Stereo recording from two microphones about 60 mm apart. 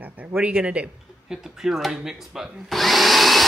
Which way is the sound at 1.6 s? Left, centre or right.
Centre.